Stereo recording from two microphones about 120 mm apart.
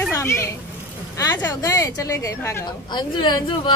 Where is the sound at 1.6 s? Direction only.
30° left (ahead or behind).